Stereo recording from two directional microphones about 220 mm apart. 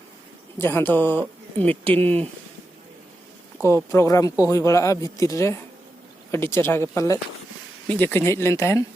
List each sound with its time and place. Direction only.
0.6 s speech: 10° left (ahead or behind)
3.8 s speech: 15° left (ahead or behind)